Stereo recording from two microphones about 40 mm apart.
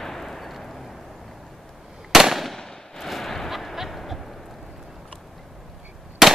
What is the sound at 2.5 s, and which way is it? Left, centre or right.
Firecracker, centre.